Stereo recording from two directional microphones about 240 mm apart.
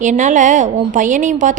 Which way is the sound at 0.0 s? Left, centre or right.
Right.